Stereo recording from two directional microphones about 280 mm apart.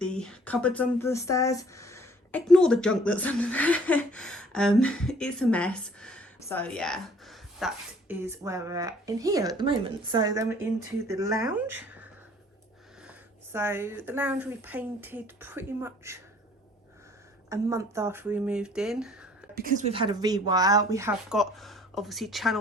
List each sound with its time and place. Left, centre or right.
0.0 s speech: centre
13.1 s speech: centre
17.5 s speech: centre
19.5 s speech: right; by 22.5 s centre